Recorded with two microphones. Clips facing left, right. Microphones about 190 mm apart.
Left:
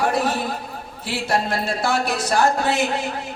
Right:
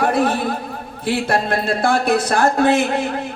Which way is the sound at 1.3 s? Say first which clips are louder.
Even; 55° right (ahead or behind).